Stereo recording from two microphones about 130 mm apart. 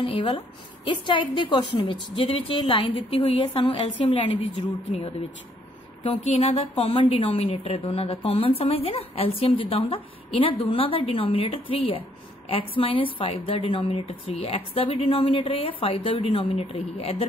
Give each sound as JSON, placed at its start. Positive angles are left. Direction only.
{"t": 0.0, "sound": "a woman's voice", "side_deg": 45}
{"t": 6.2, "sound": "a woman's voice", "side_deg": 55}